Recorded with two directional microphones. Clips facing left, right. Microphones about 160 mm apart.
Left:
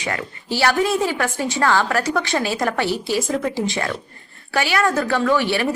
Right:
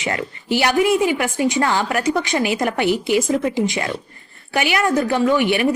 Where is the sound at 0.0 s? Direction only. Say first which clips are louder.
Right 2 dB; 25° right (ahead or behind).